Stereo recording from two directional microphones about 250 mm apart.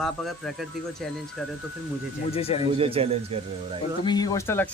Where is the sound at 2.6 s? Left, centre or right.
Right.